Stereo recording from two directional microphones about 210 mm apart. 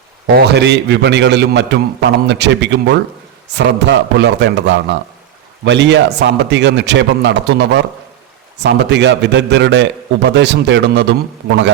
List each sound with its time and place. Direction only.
0.3 s a man's voice: 50° right (ahead or behind)